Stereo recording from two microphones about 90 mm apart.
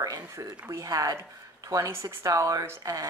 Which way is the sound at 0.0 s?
40° right (ahead or behind).